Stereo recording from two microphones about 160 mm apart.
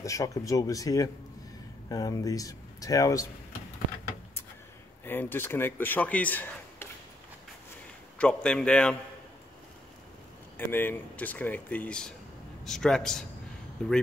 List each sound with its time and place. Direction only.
0.0 s speech: 20° left (ahead or behind)
5.0 s speech: 15° left (ahead or behind)
8.2 s speech: 5° left (ahead or behind)
10.7 s a man's voice: 15° left (ahead or behind)